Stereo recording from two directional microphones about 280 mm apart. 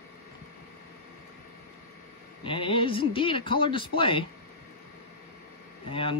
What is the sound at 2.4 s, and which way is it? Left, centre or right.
Speech, centre.